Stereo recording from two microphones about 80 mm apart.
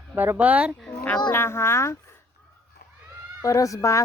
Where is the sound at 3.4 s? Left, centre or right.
Left.